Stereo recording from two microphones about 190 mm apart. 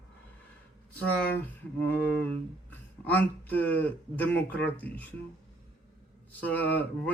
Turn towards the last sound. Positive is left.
turn(degrees=10)  # may be behind; listen again after turning